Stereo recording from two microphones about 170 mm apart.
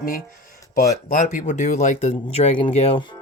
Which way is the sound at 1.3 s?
45° left (ahead or behind).